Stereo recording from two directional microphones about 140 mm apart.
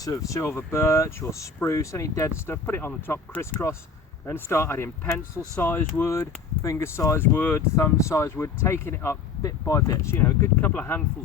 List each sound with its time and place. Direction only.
0.0 s speech: 25° left (ahead or behind)